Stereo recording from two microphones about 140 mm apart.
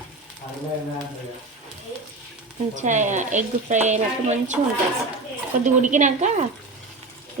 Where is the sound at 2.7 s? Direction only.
60° right (ahead or behind).